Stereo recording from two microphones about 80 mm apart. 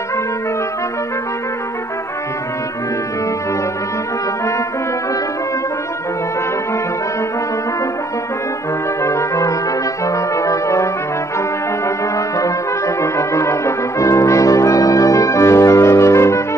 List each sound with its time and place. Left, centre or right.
9.0 s brass instrument: left
12.4 s brass instrument: left